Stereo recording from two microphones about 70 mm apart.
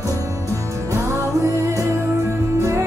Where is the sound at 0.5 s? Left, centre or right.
Right.